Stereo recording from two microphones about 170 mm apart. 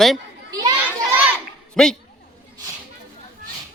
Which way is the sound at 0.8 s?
10° right (ahead or behind).